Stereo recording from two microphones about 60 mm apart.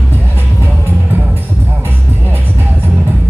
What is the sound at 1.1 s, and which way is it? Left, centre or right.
Music, right.